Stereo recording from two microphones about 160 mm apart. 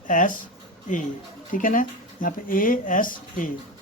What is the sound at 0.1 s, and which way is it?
Speech, 55° left (ahead or behind).